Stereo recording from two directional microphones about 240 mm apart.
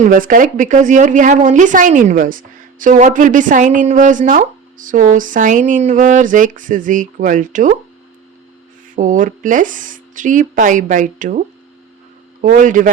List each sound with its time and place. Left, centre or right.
0.0 s speech: right
9.0 s speech: right